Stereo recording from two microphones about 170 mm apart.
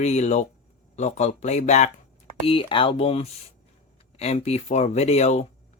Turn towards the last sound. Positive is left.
turn(degrees=40)  # may be behind; listen again after turning